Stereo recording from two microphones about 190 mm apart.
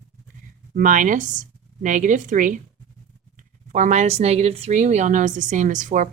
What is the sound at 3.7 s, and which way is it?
A woman's voice, 40° right (ahead or behind).